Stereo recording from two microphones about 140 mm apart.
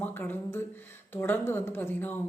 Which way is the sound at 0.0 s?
15° left (ahead or behind).